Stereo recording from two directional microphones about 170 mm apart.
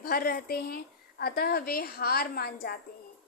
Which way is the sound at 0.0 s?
65° left (ahead or behind).